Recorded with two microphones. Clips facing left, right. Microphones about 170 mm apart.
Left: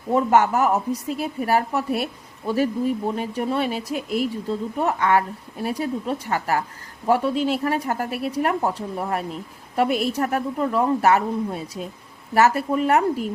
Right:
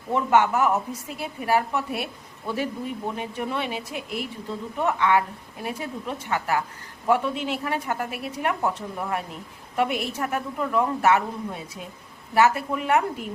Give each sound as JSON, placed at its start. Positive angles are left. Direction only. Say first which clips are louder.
{"t": 0.1, "sound": "a woman's voice", "louder": "left 3 dB", "side_deg": 40}